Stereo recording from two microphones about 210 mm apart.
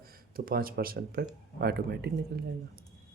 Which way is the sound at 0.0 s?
45° right (ahead or behind).